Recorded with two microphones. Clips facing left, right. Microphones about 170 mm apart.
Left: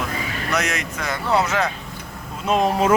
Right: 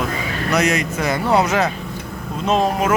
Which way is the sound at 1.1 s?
15° right (ahead or behind).